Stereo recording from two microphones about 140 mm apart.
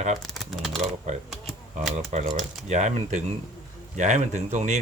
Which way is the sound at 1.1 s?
60° right (ahead or behind).